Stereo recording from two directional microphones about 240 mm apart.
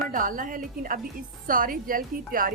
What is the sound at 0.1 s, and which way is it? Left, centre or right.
A woman's voice, right.